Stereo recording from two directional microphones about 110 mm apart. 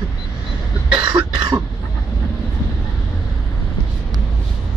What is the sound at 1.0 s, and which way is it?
Cough, 45° right (ahead or behind).